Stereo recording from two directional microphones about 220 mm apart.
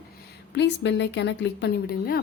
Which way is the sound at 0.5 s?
55° left (ahead or behind).